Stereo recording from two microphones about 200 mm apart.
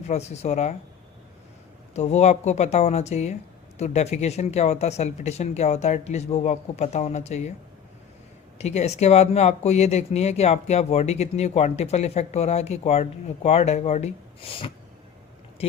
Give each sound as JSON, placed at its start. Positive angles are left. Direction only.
{"t": 0.1, "sound": "speech", "side_deg": 35}
{"t": 1.9, "sound": "speech", "side_deg": 35}
{"t": 8.5, "sound": "speech", "side_deg": 35}